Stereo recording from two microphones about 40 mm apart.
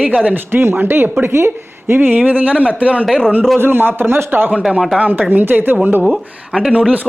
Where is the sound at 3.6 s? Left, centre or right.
Right.